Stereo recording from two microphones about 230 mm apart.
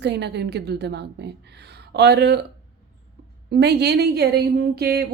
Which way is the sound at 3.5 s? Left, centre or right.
Right.